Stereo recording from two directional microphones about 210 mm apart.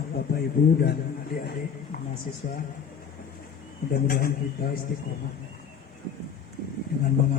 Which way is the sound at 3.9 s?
45° left (ahead or behind).